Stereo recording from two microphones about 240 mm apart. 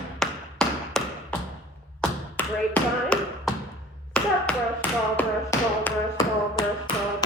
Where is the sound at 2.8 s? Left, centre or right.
Centre.